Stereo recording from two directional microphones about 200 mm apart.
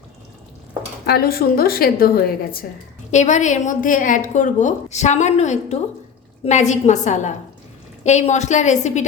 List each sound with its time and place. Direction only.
1.0 s a woman's voice: 50° left (ahead or behind)
3.1 s a woman's voice: 35° left (ahead or behind)